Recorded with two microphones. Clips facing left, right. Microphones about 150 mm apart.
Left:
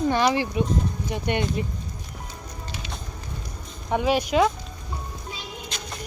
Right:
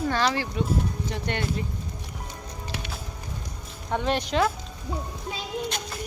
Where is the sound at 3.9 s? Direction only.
10° left (ahead or behind).